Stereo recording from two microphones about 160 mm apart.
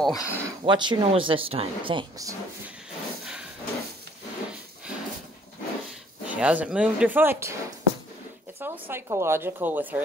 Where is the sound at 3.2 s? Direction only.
5° right (ahead or behind).